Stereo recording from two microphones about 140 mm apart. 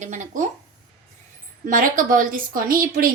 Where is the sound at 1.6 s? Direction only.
75° right (ahead or behind); by 3.1 s 90° right.